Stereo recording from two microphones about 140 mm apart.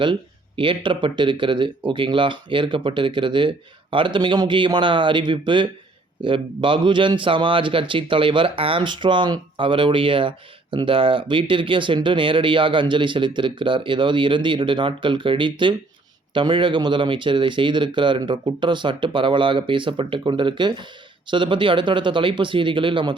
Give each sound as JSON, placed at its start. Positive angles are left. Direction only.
{"t": 0.0, "sound": "speech", "side_deg": -35}